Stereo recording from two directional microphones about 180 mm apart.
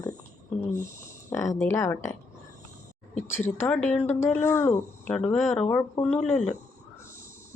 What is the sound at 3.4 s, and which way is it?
Speech, 10° left (ahead or behind).